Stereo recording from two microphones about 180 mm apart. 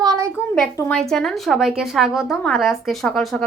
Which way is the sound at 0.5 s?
5° left (ahead or behind).